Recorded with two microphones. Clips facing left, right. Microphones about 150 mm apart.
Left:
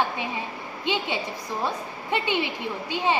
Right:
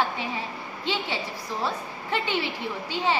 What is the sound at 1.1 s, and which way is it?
A woman's voice, 15° left (ahead or behind).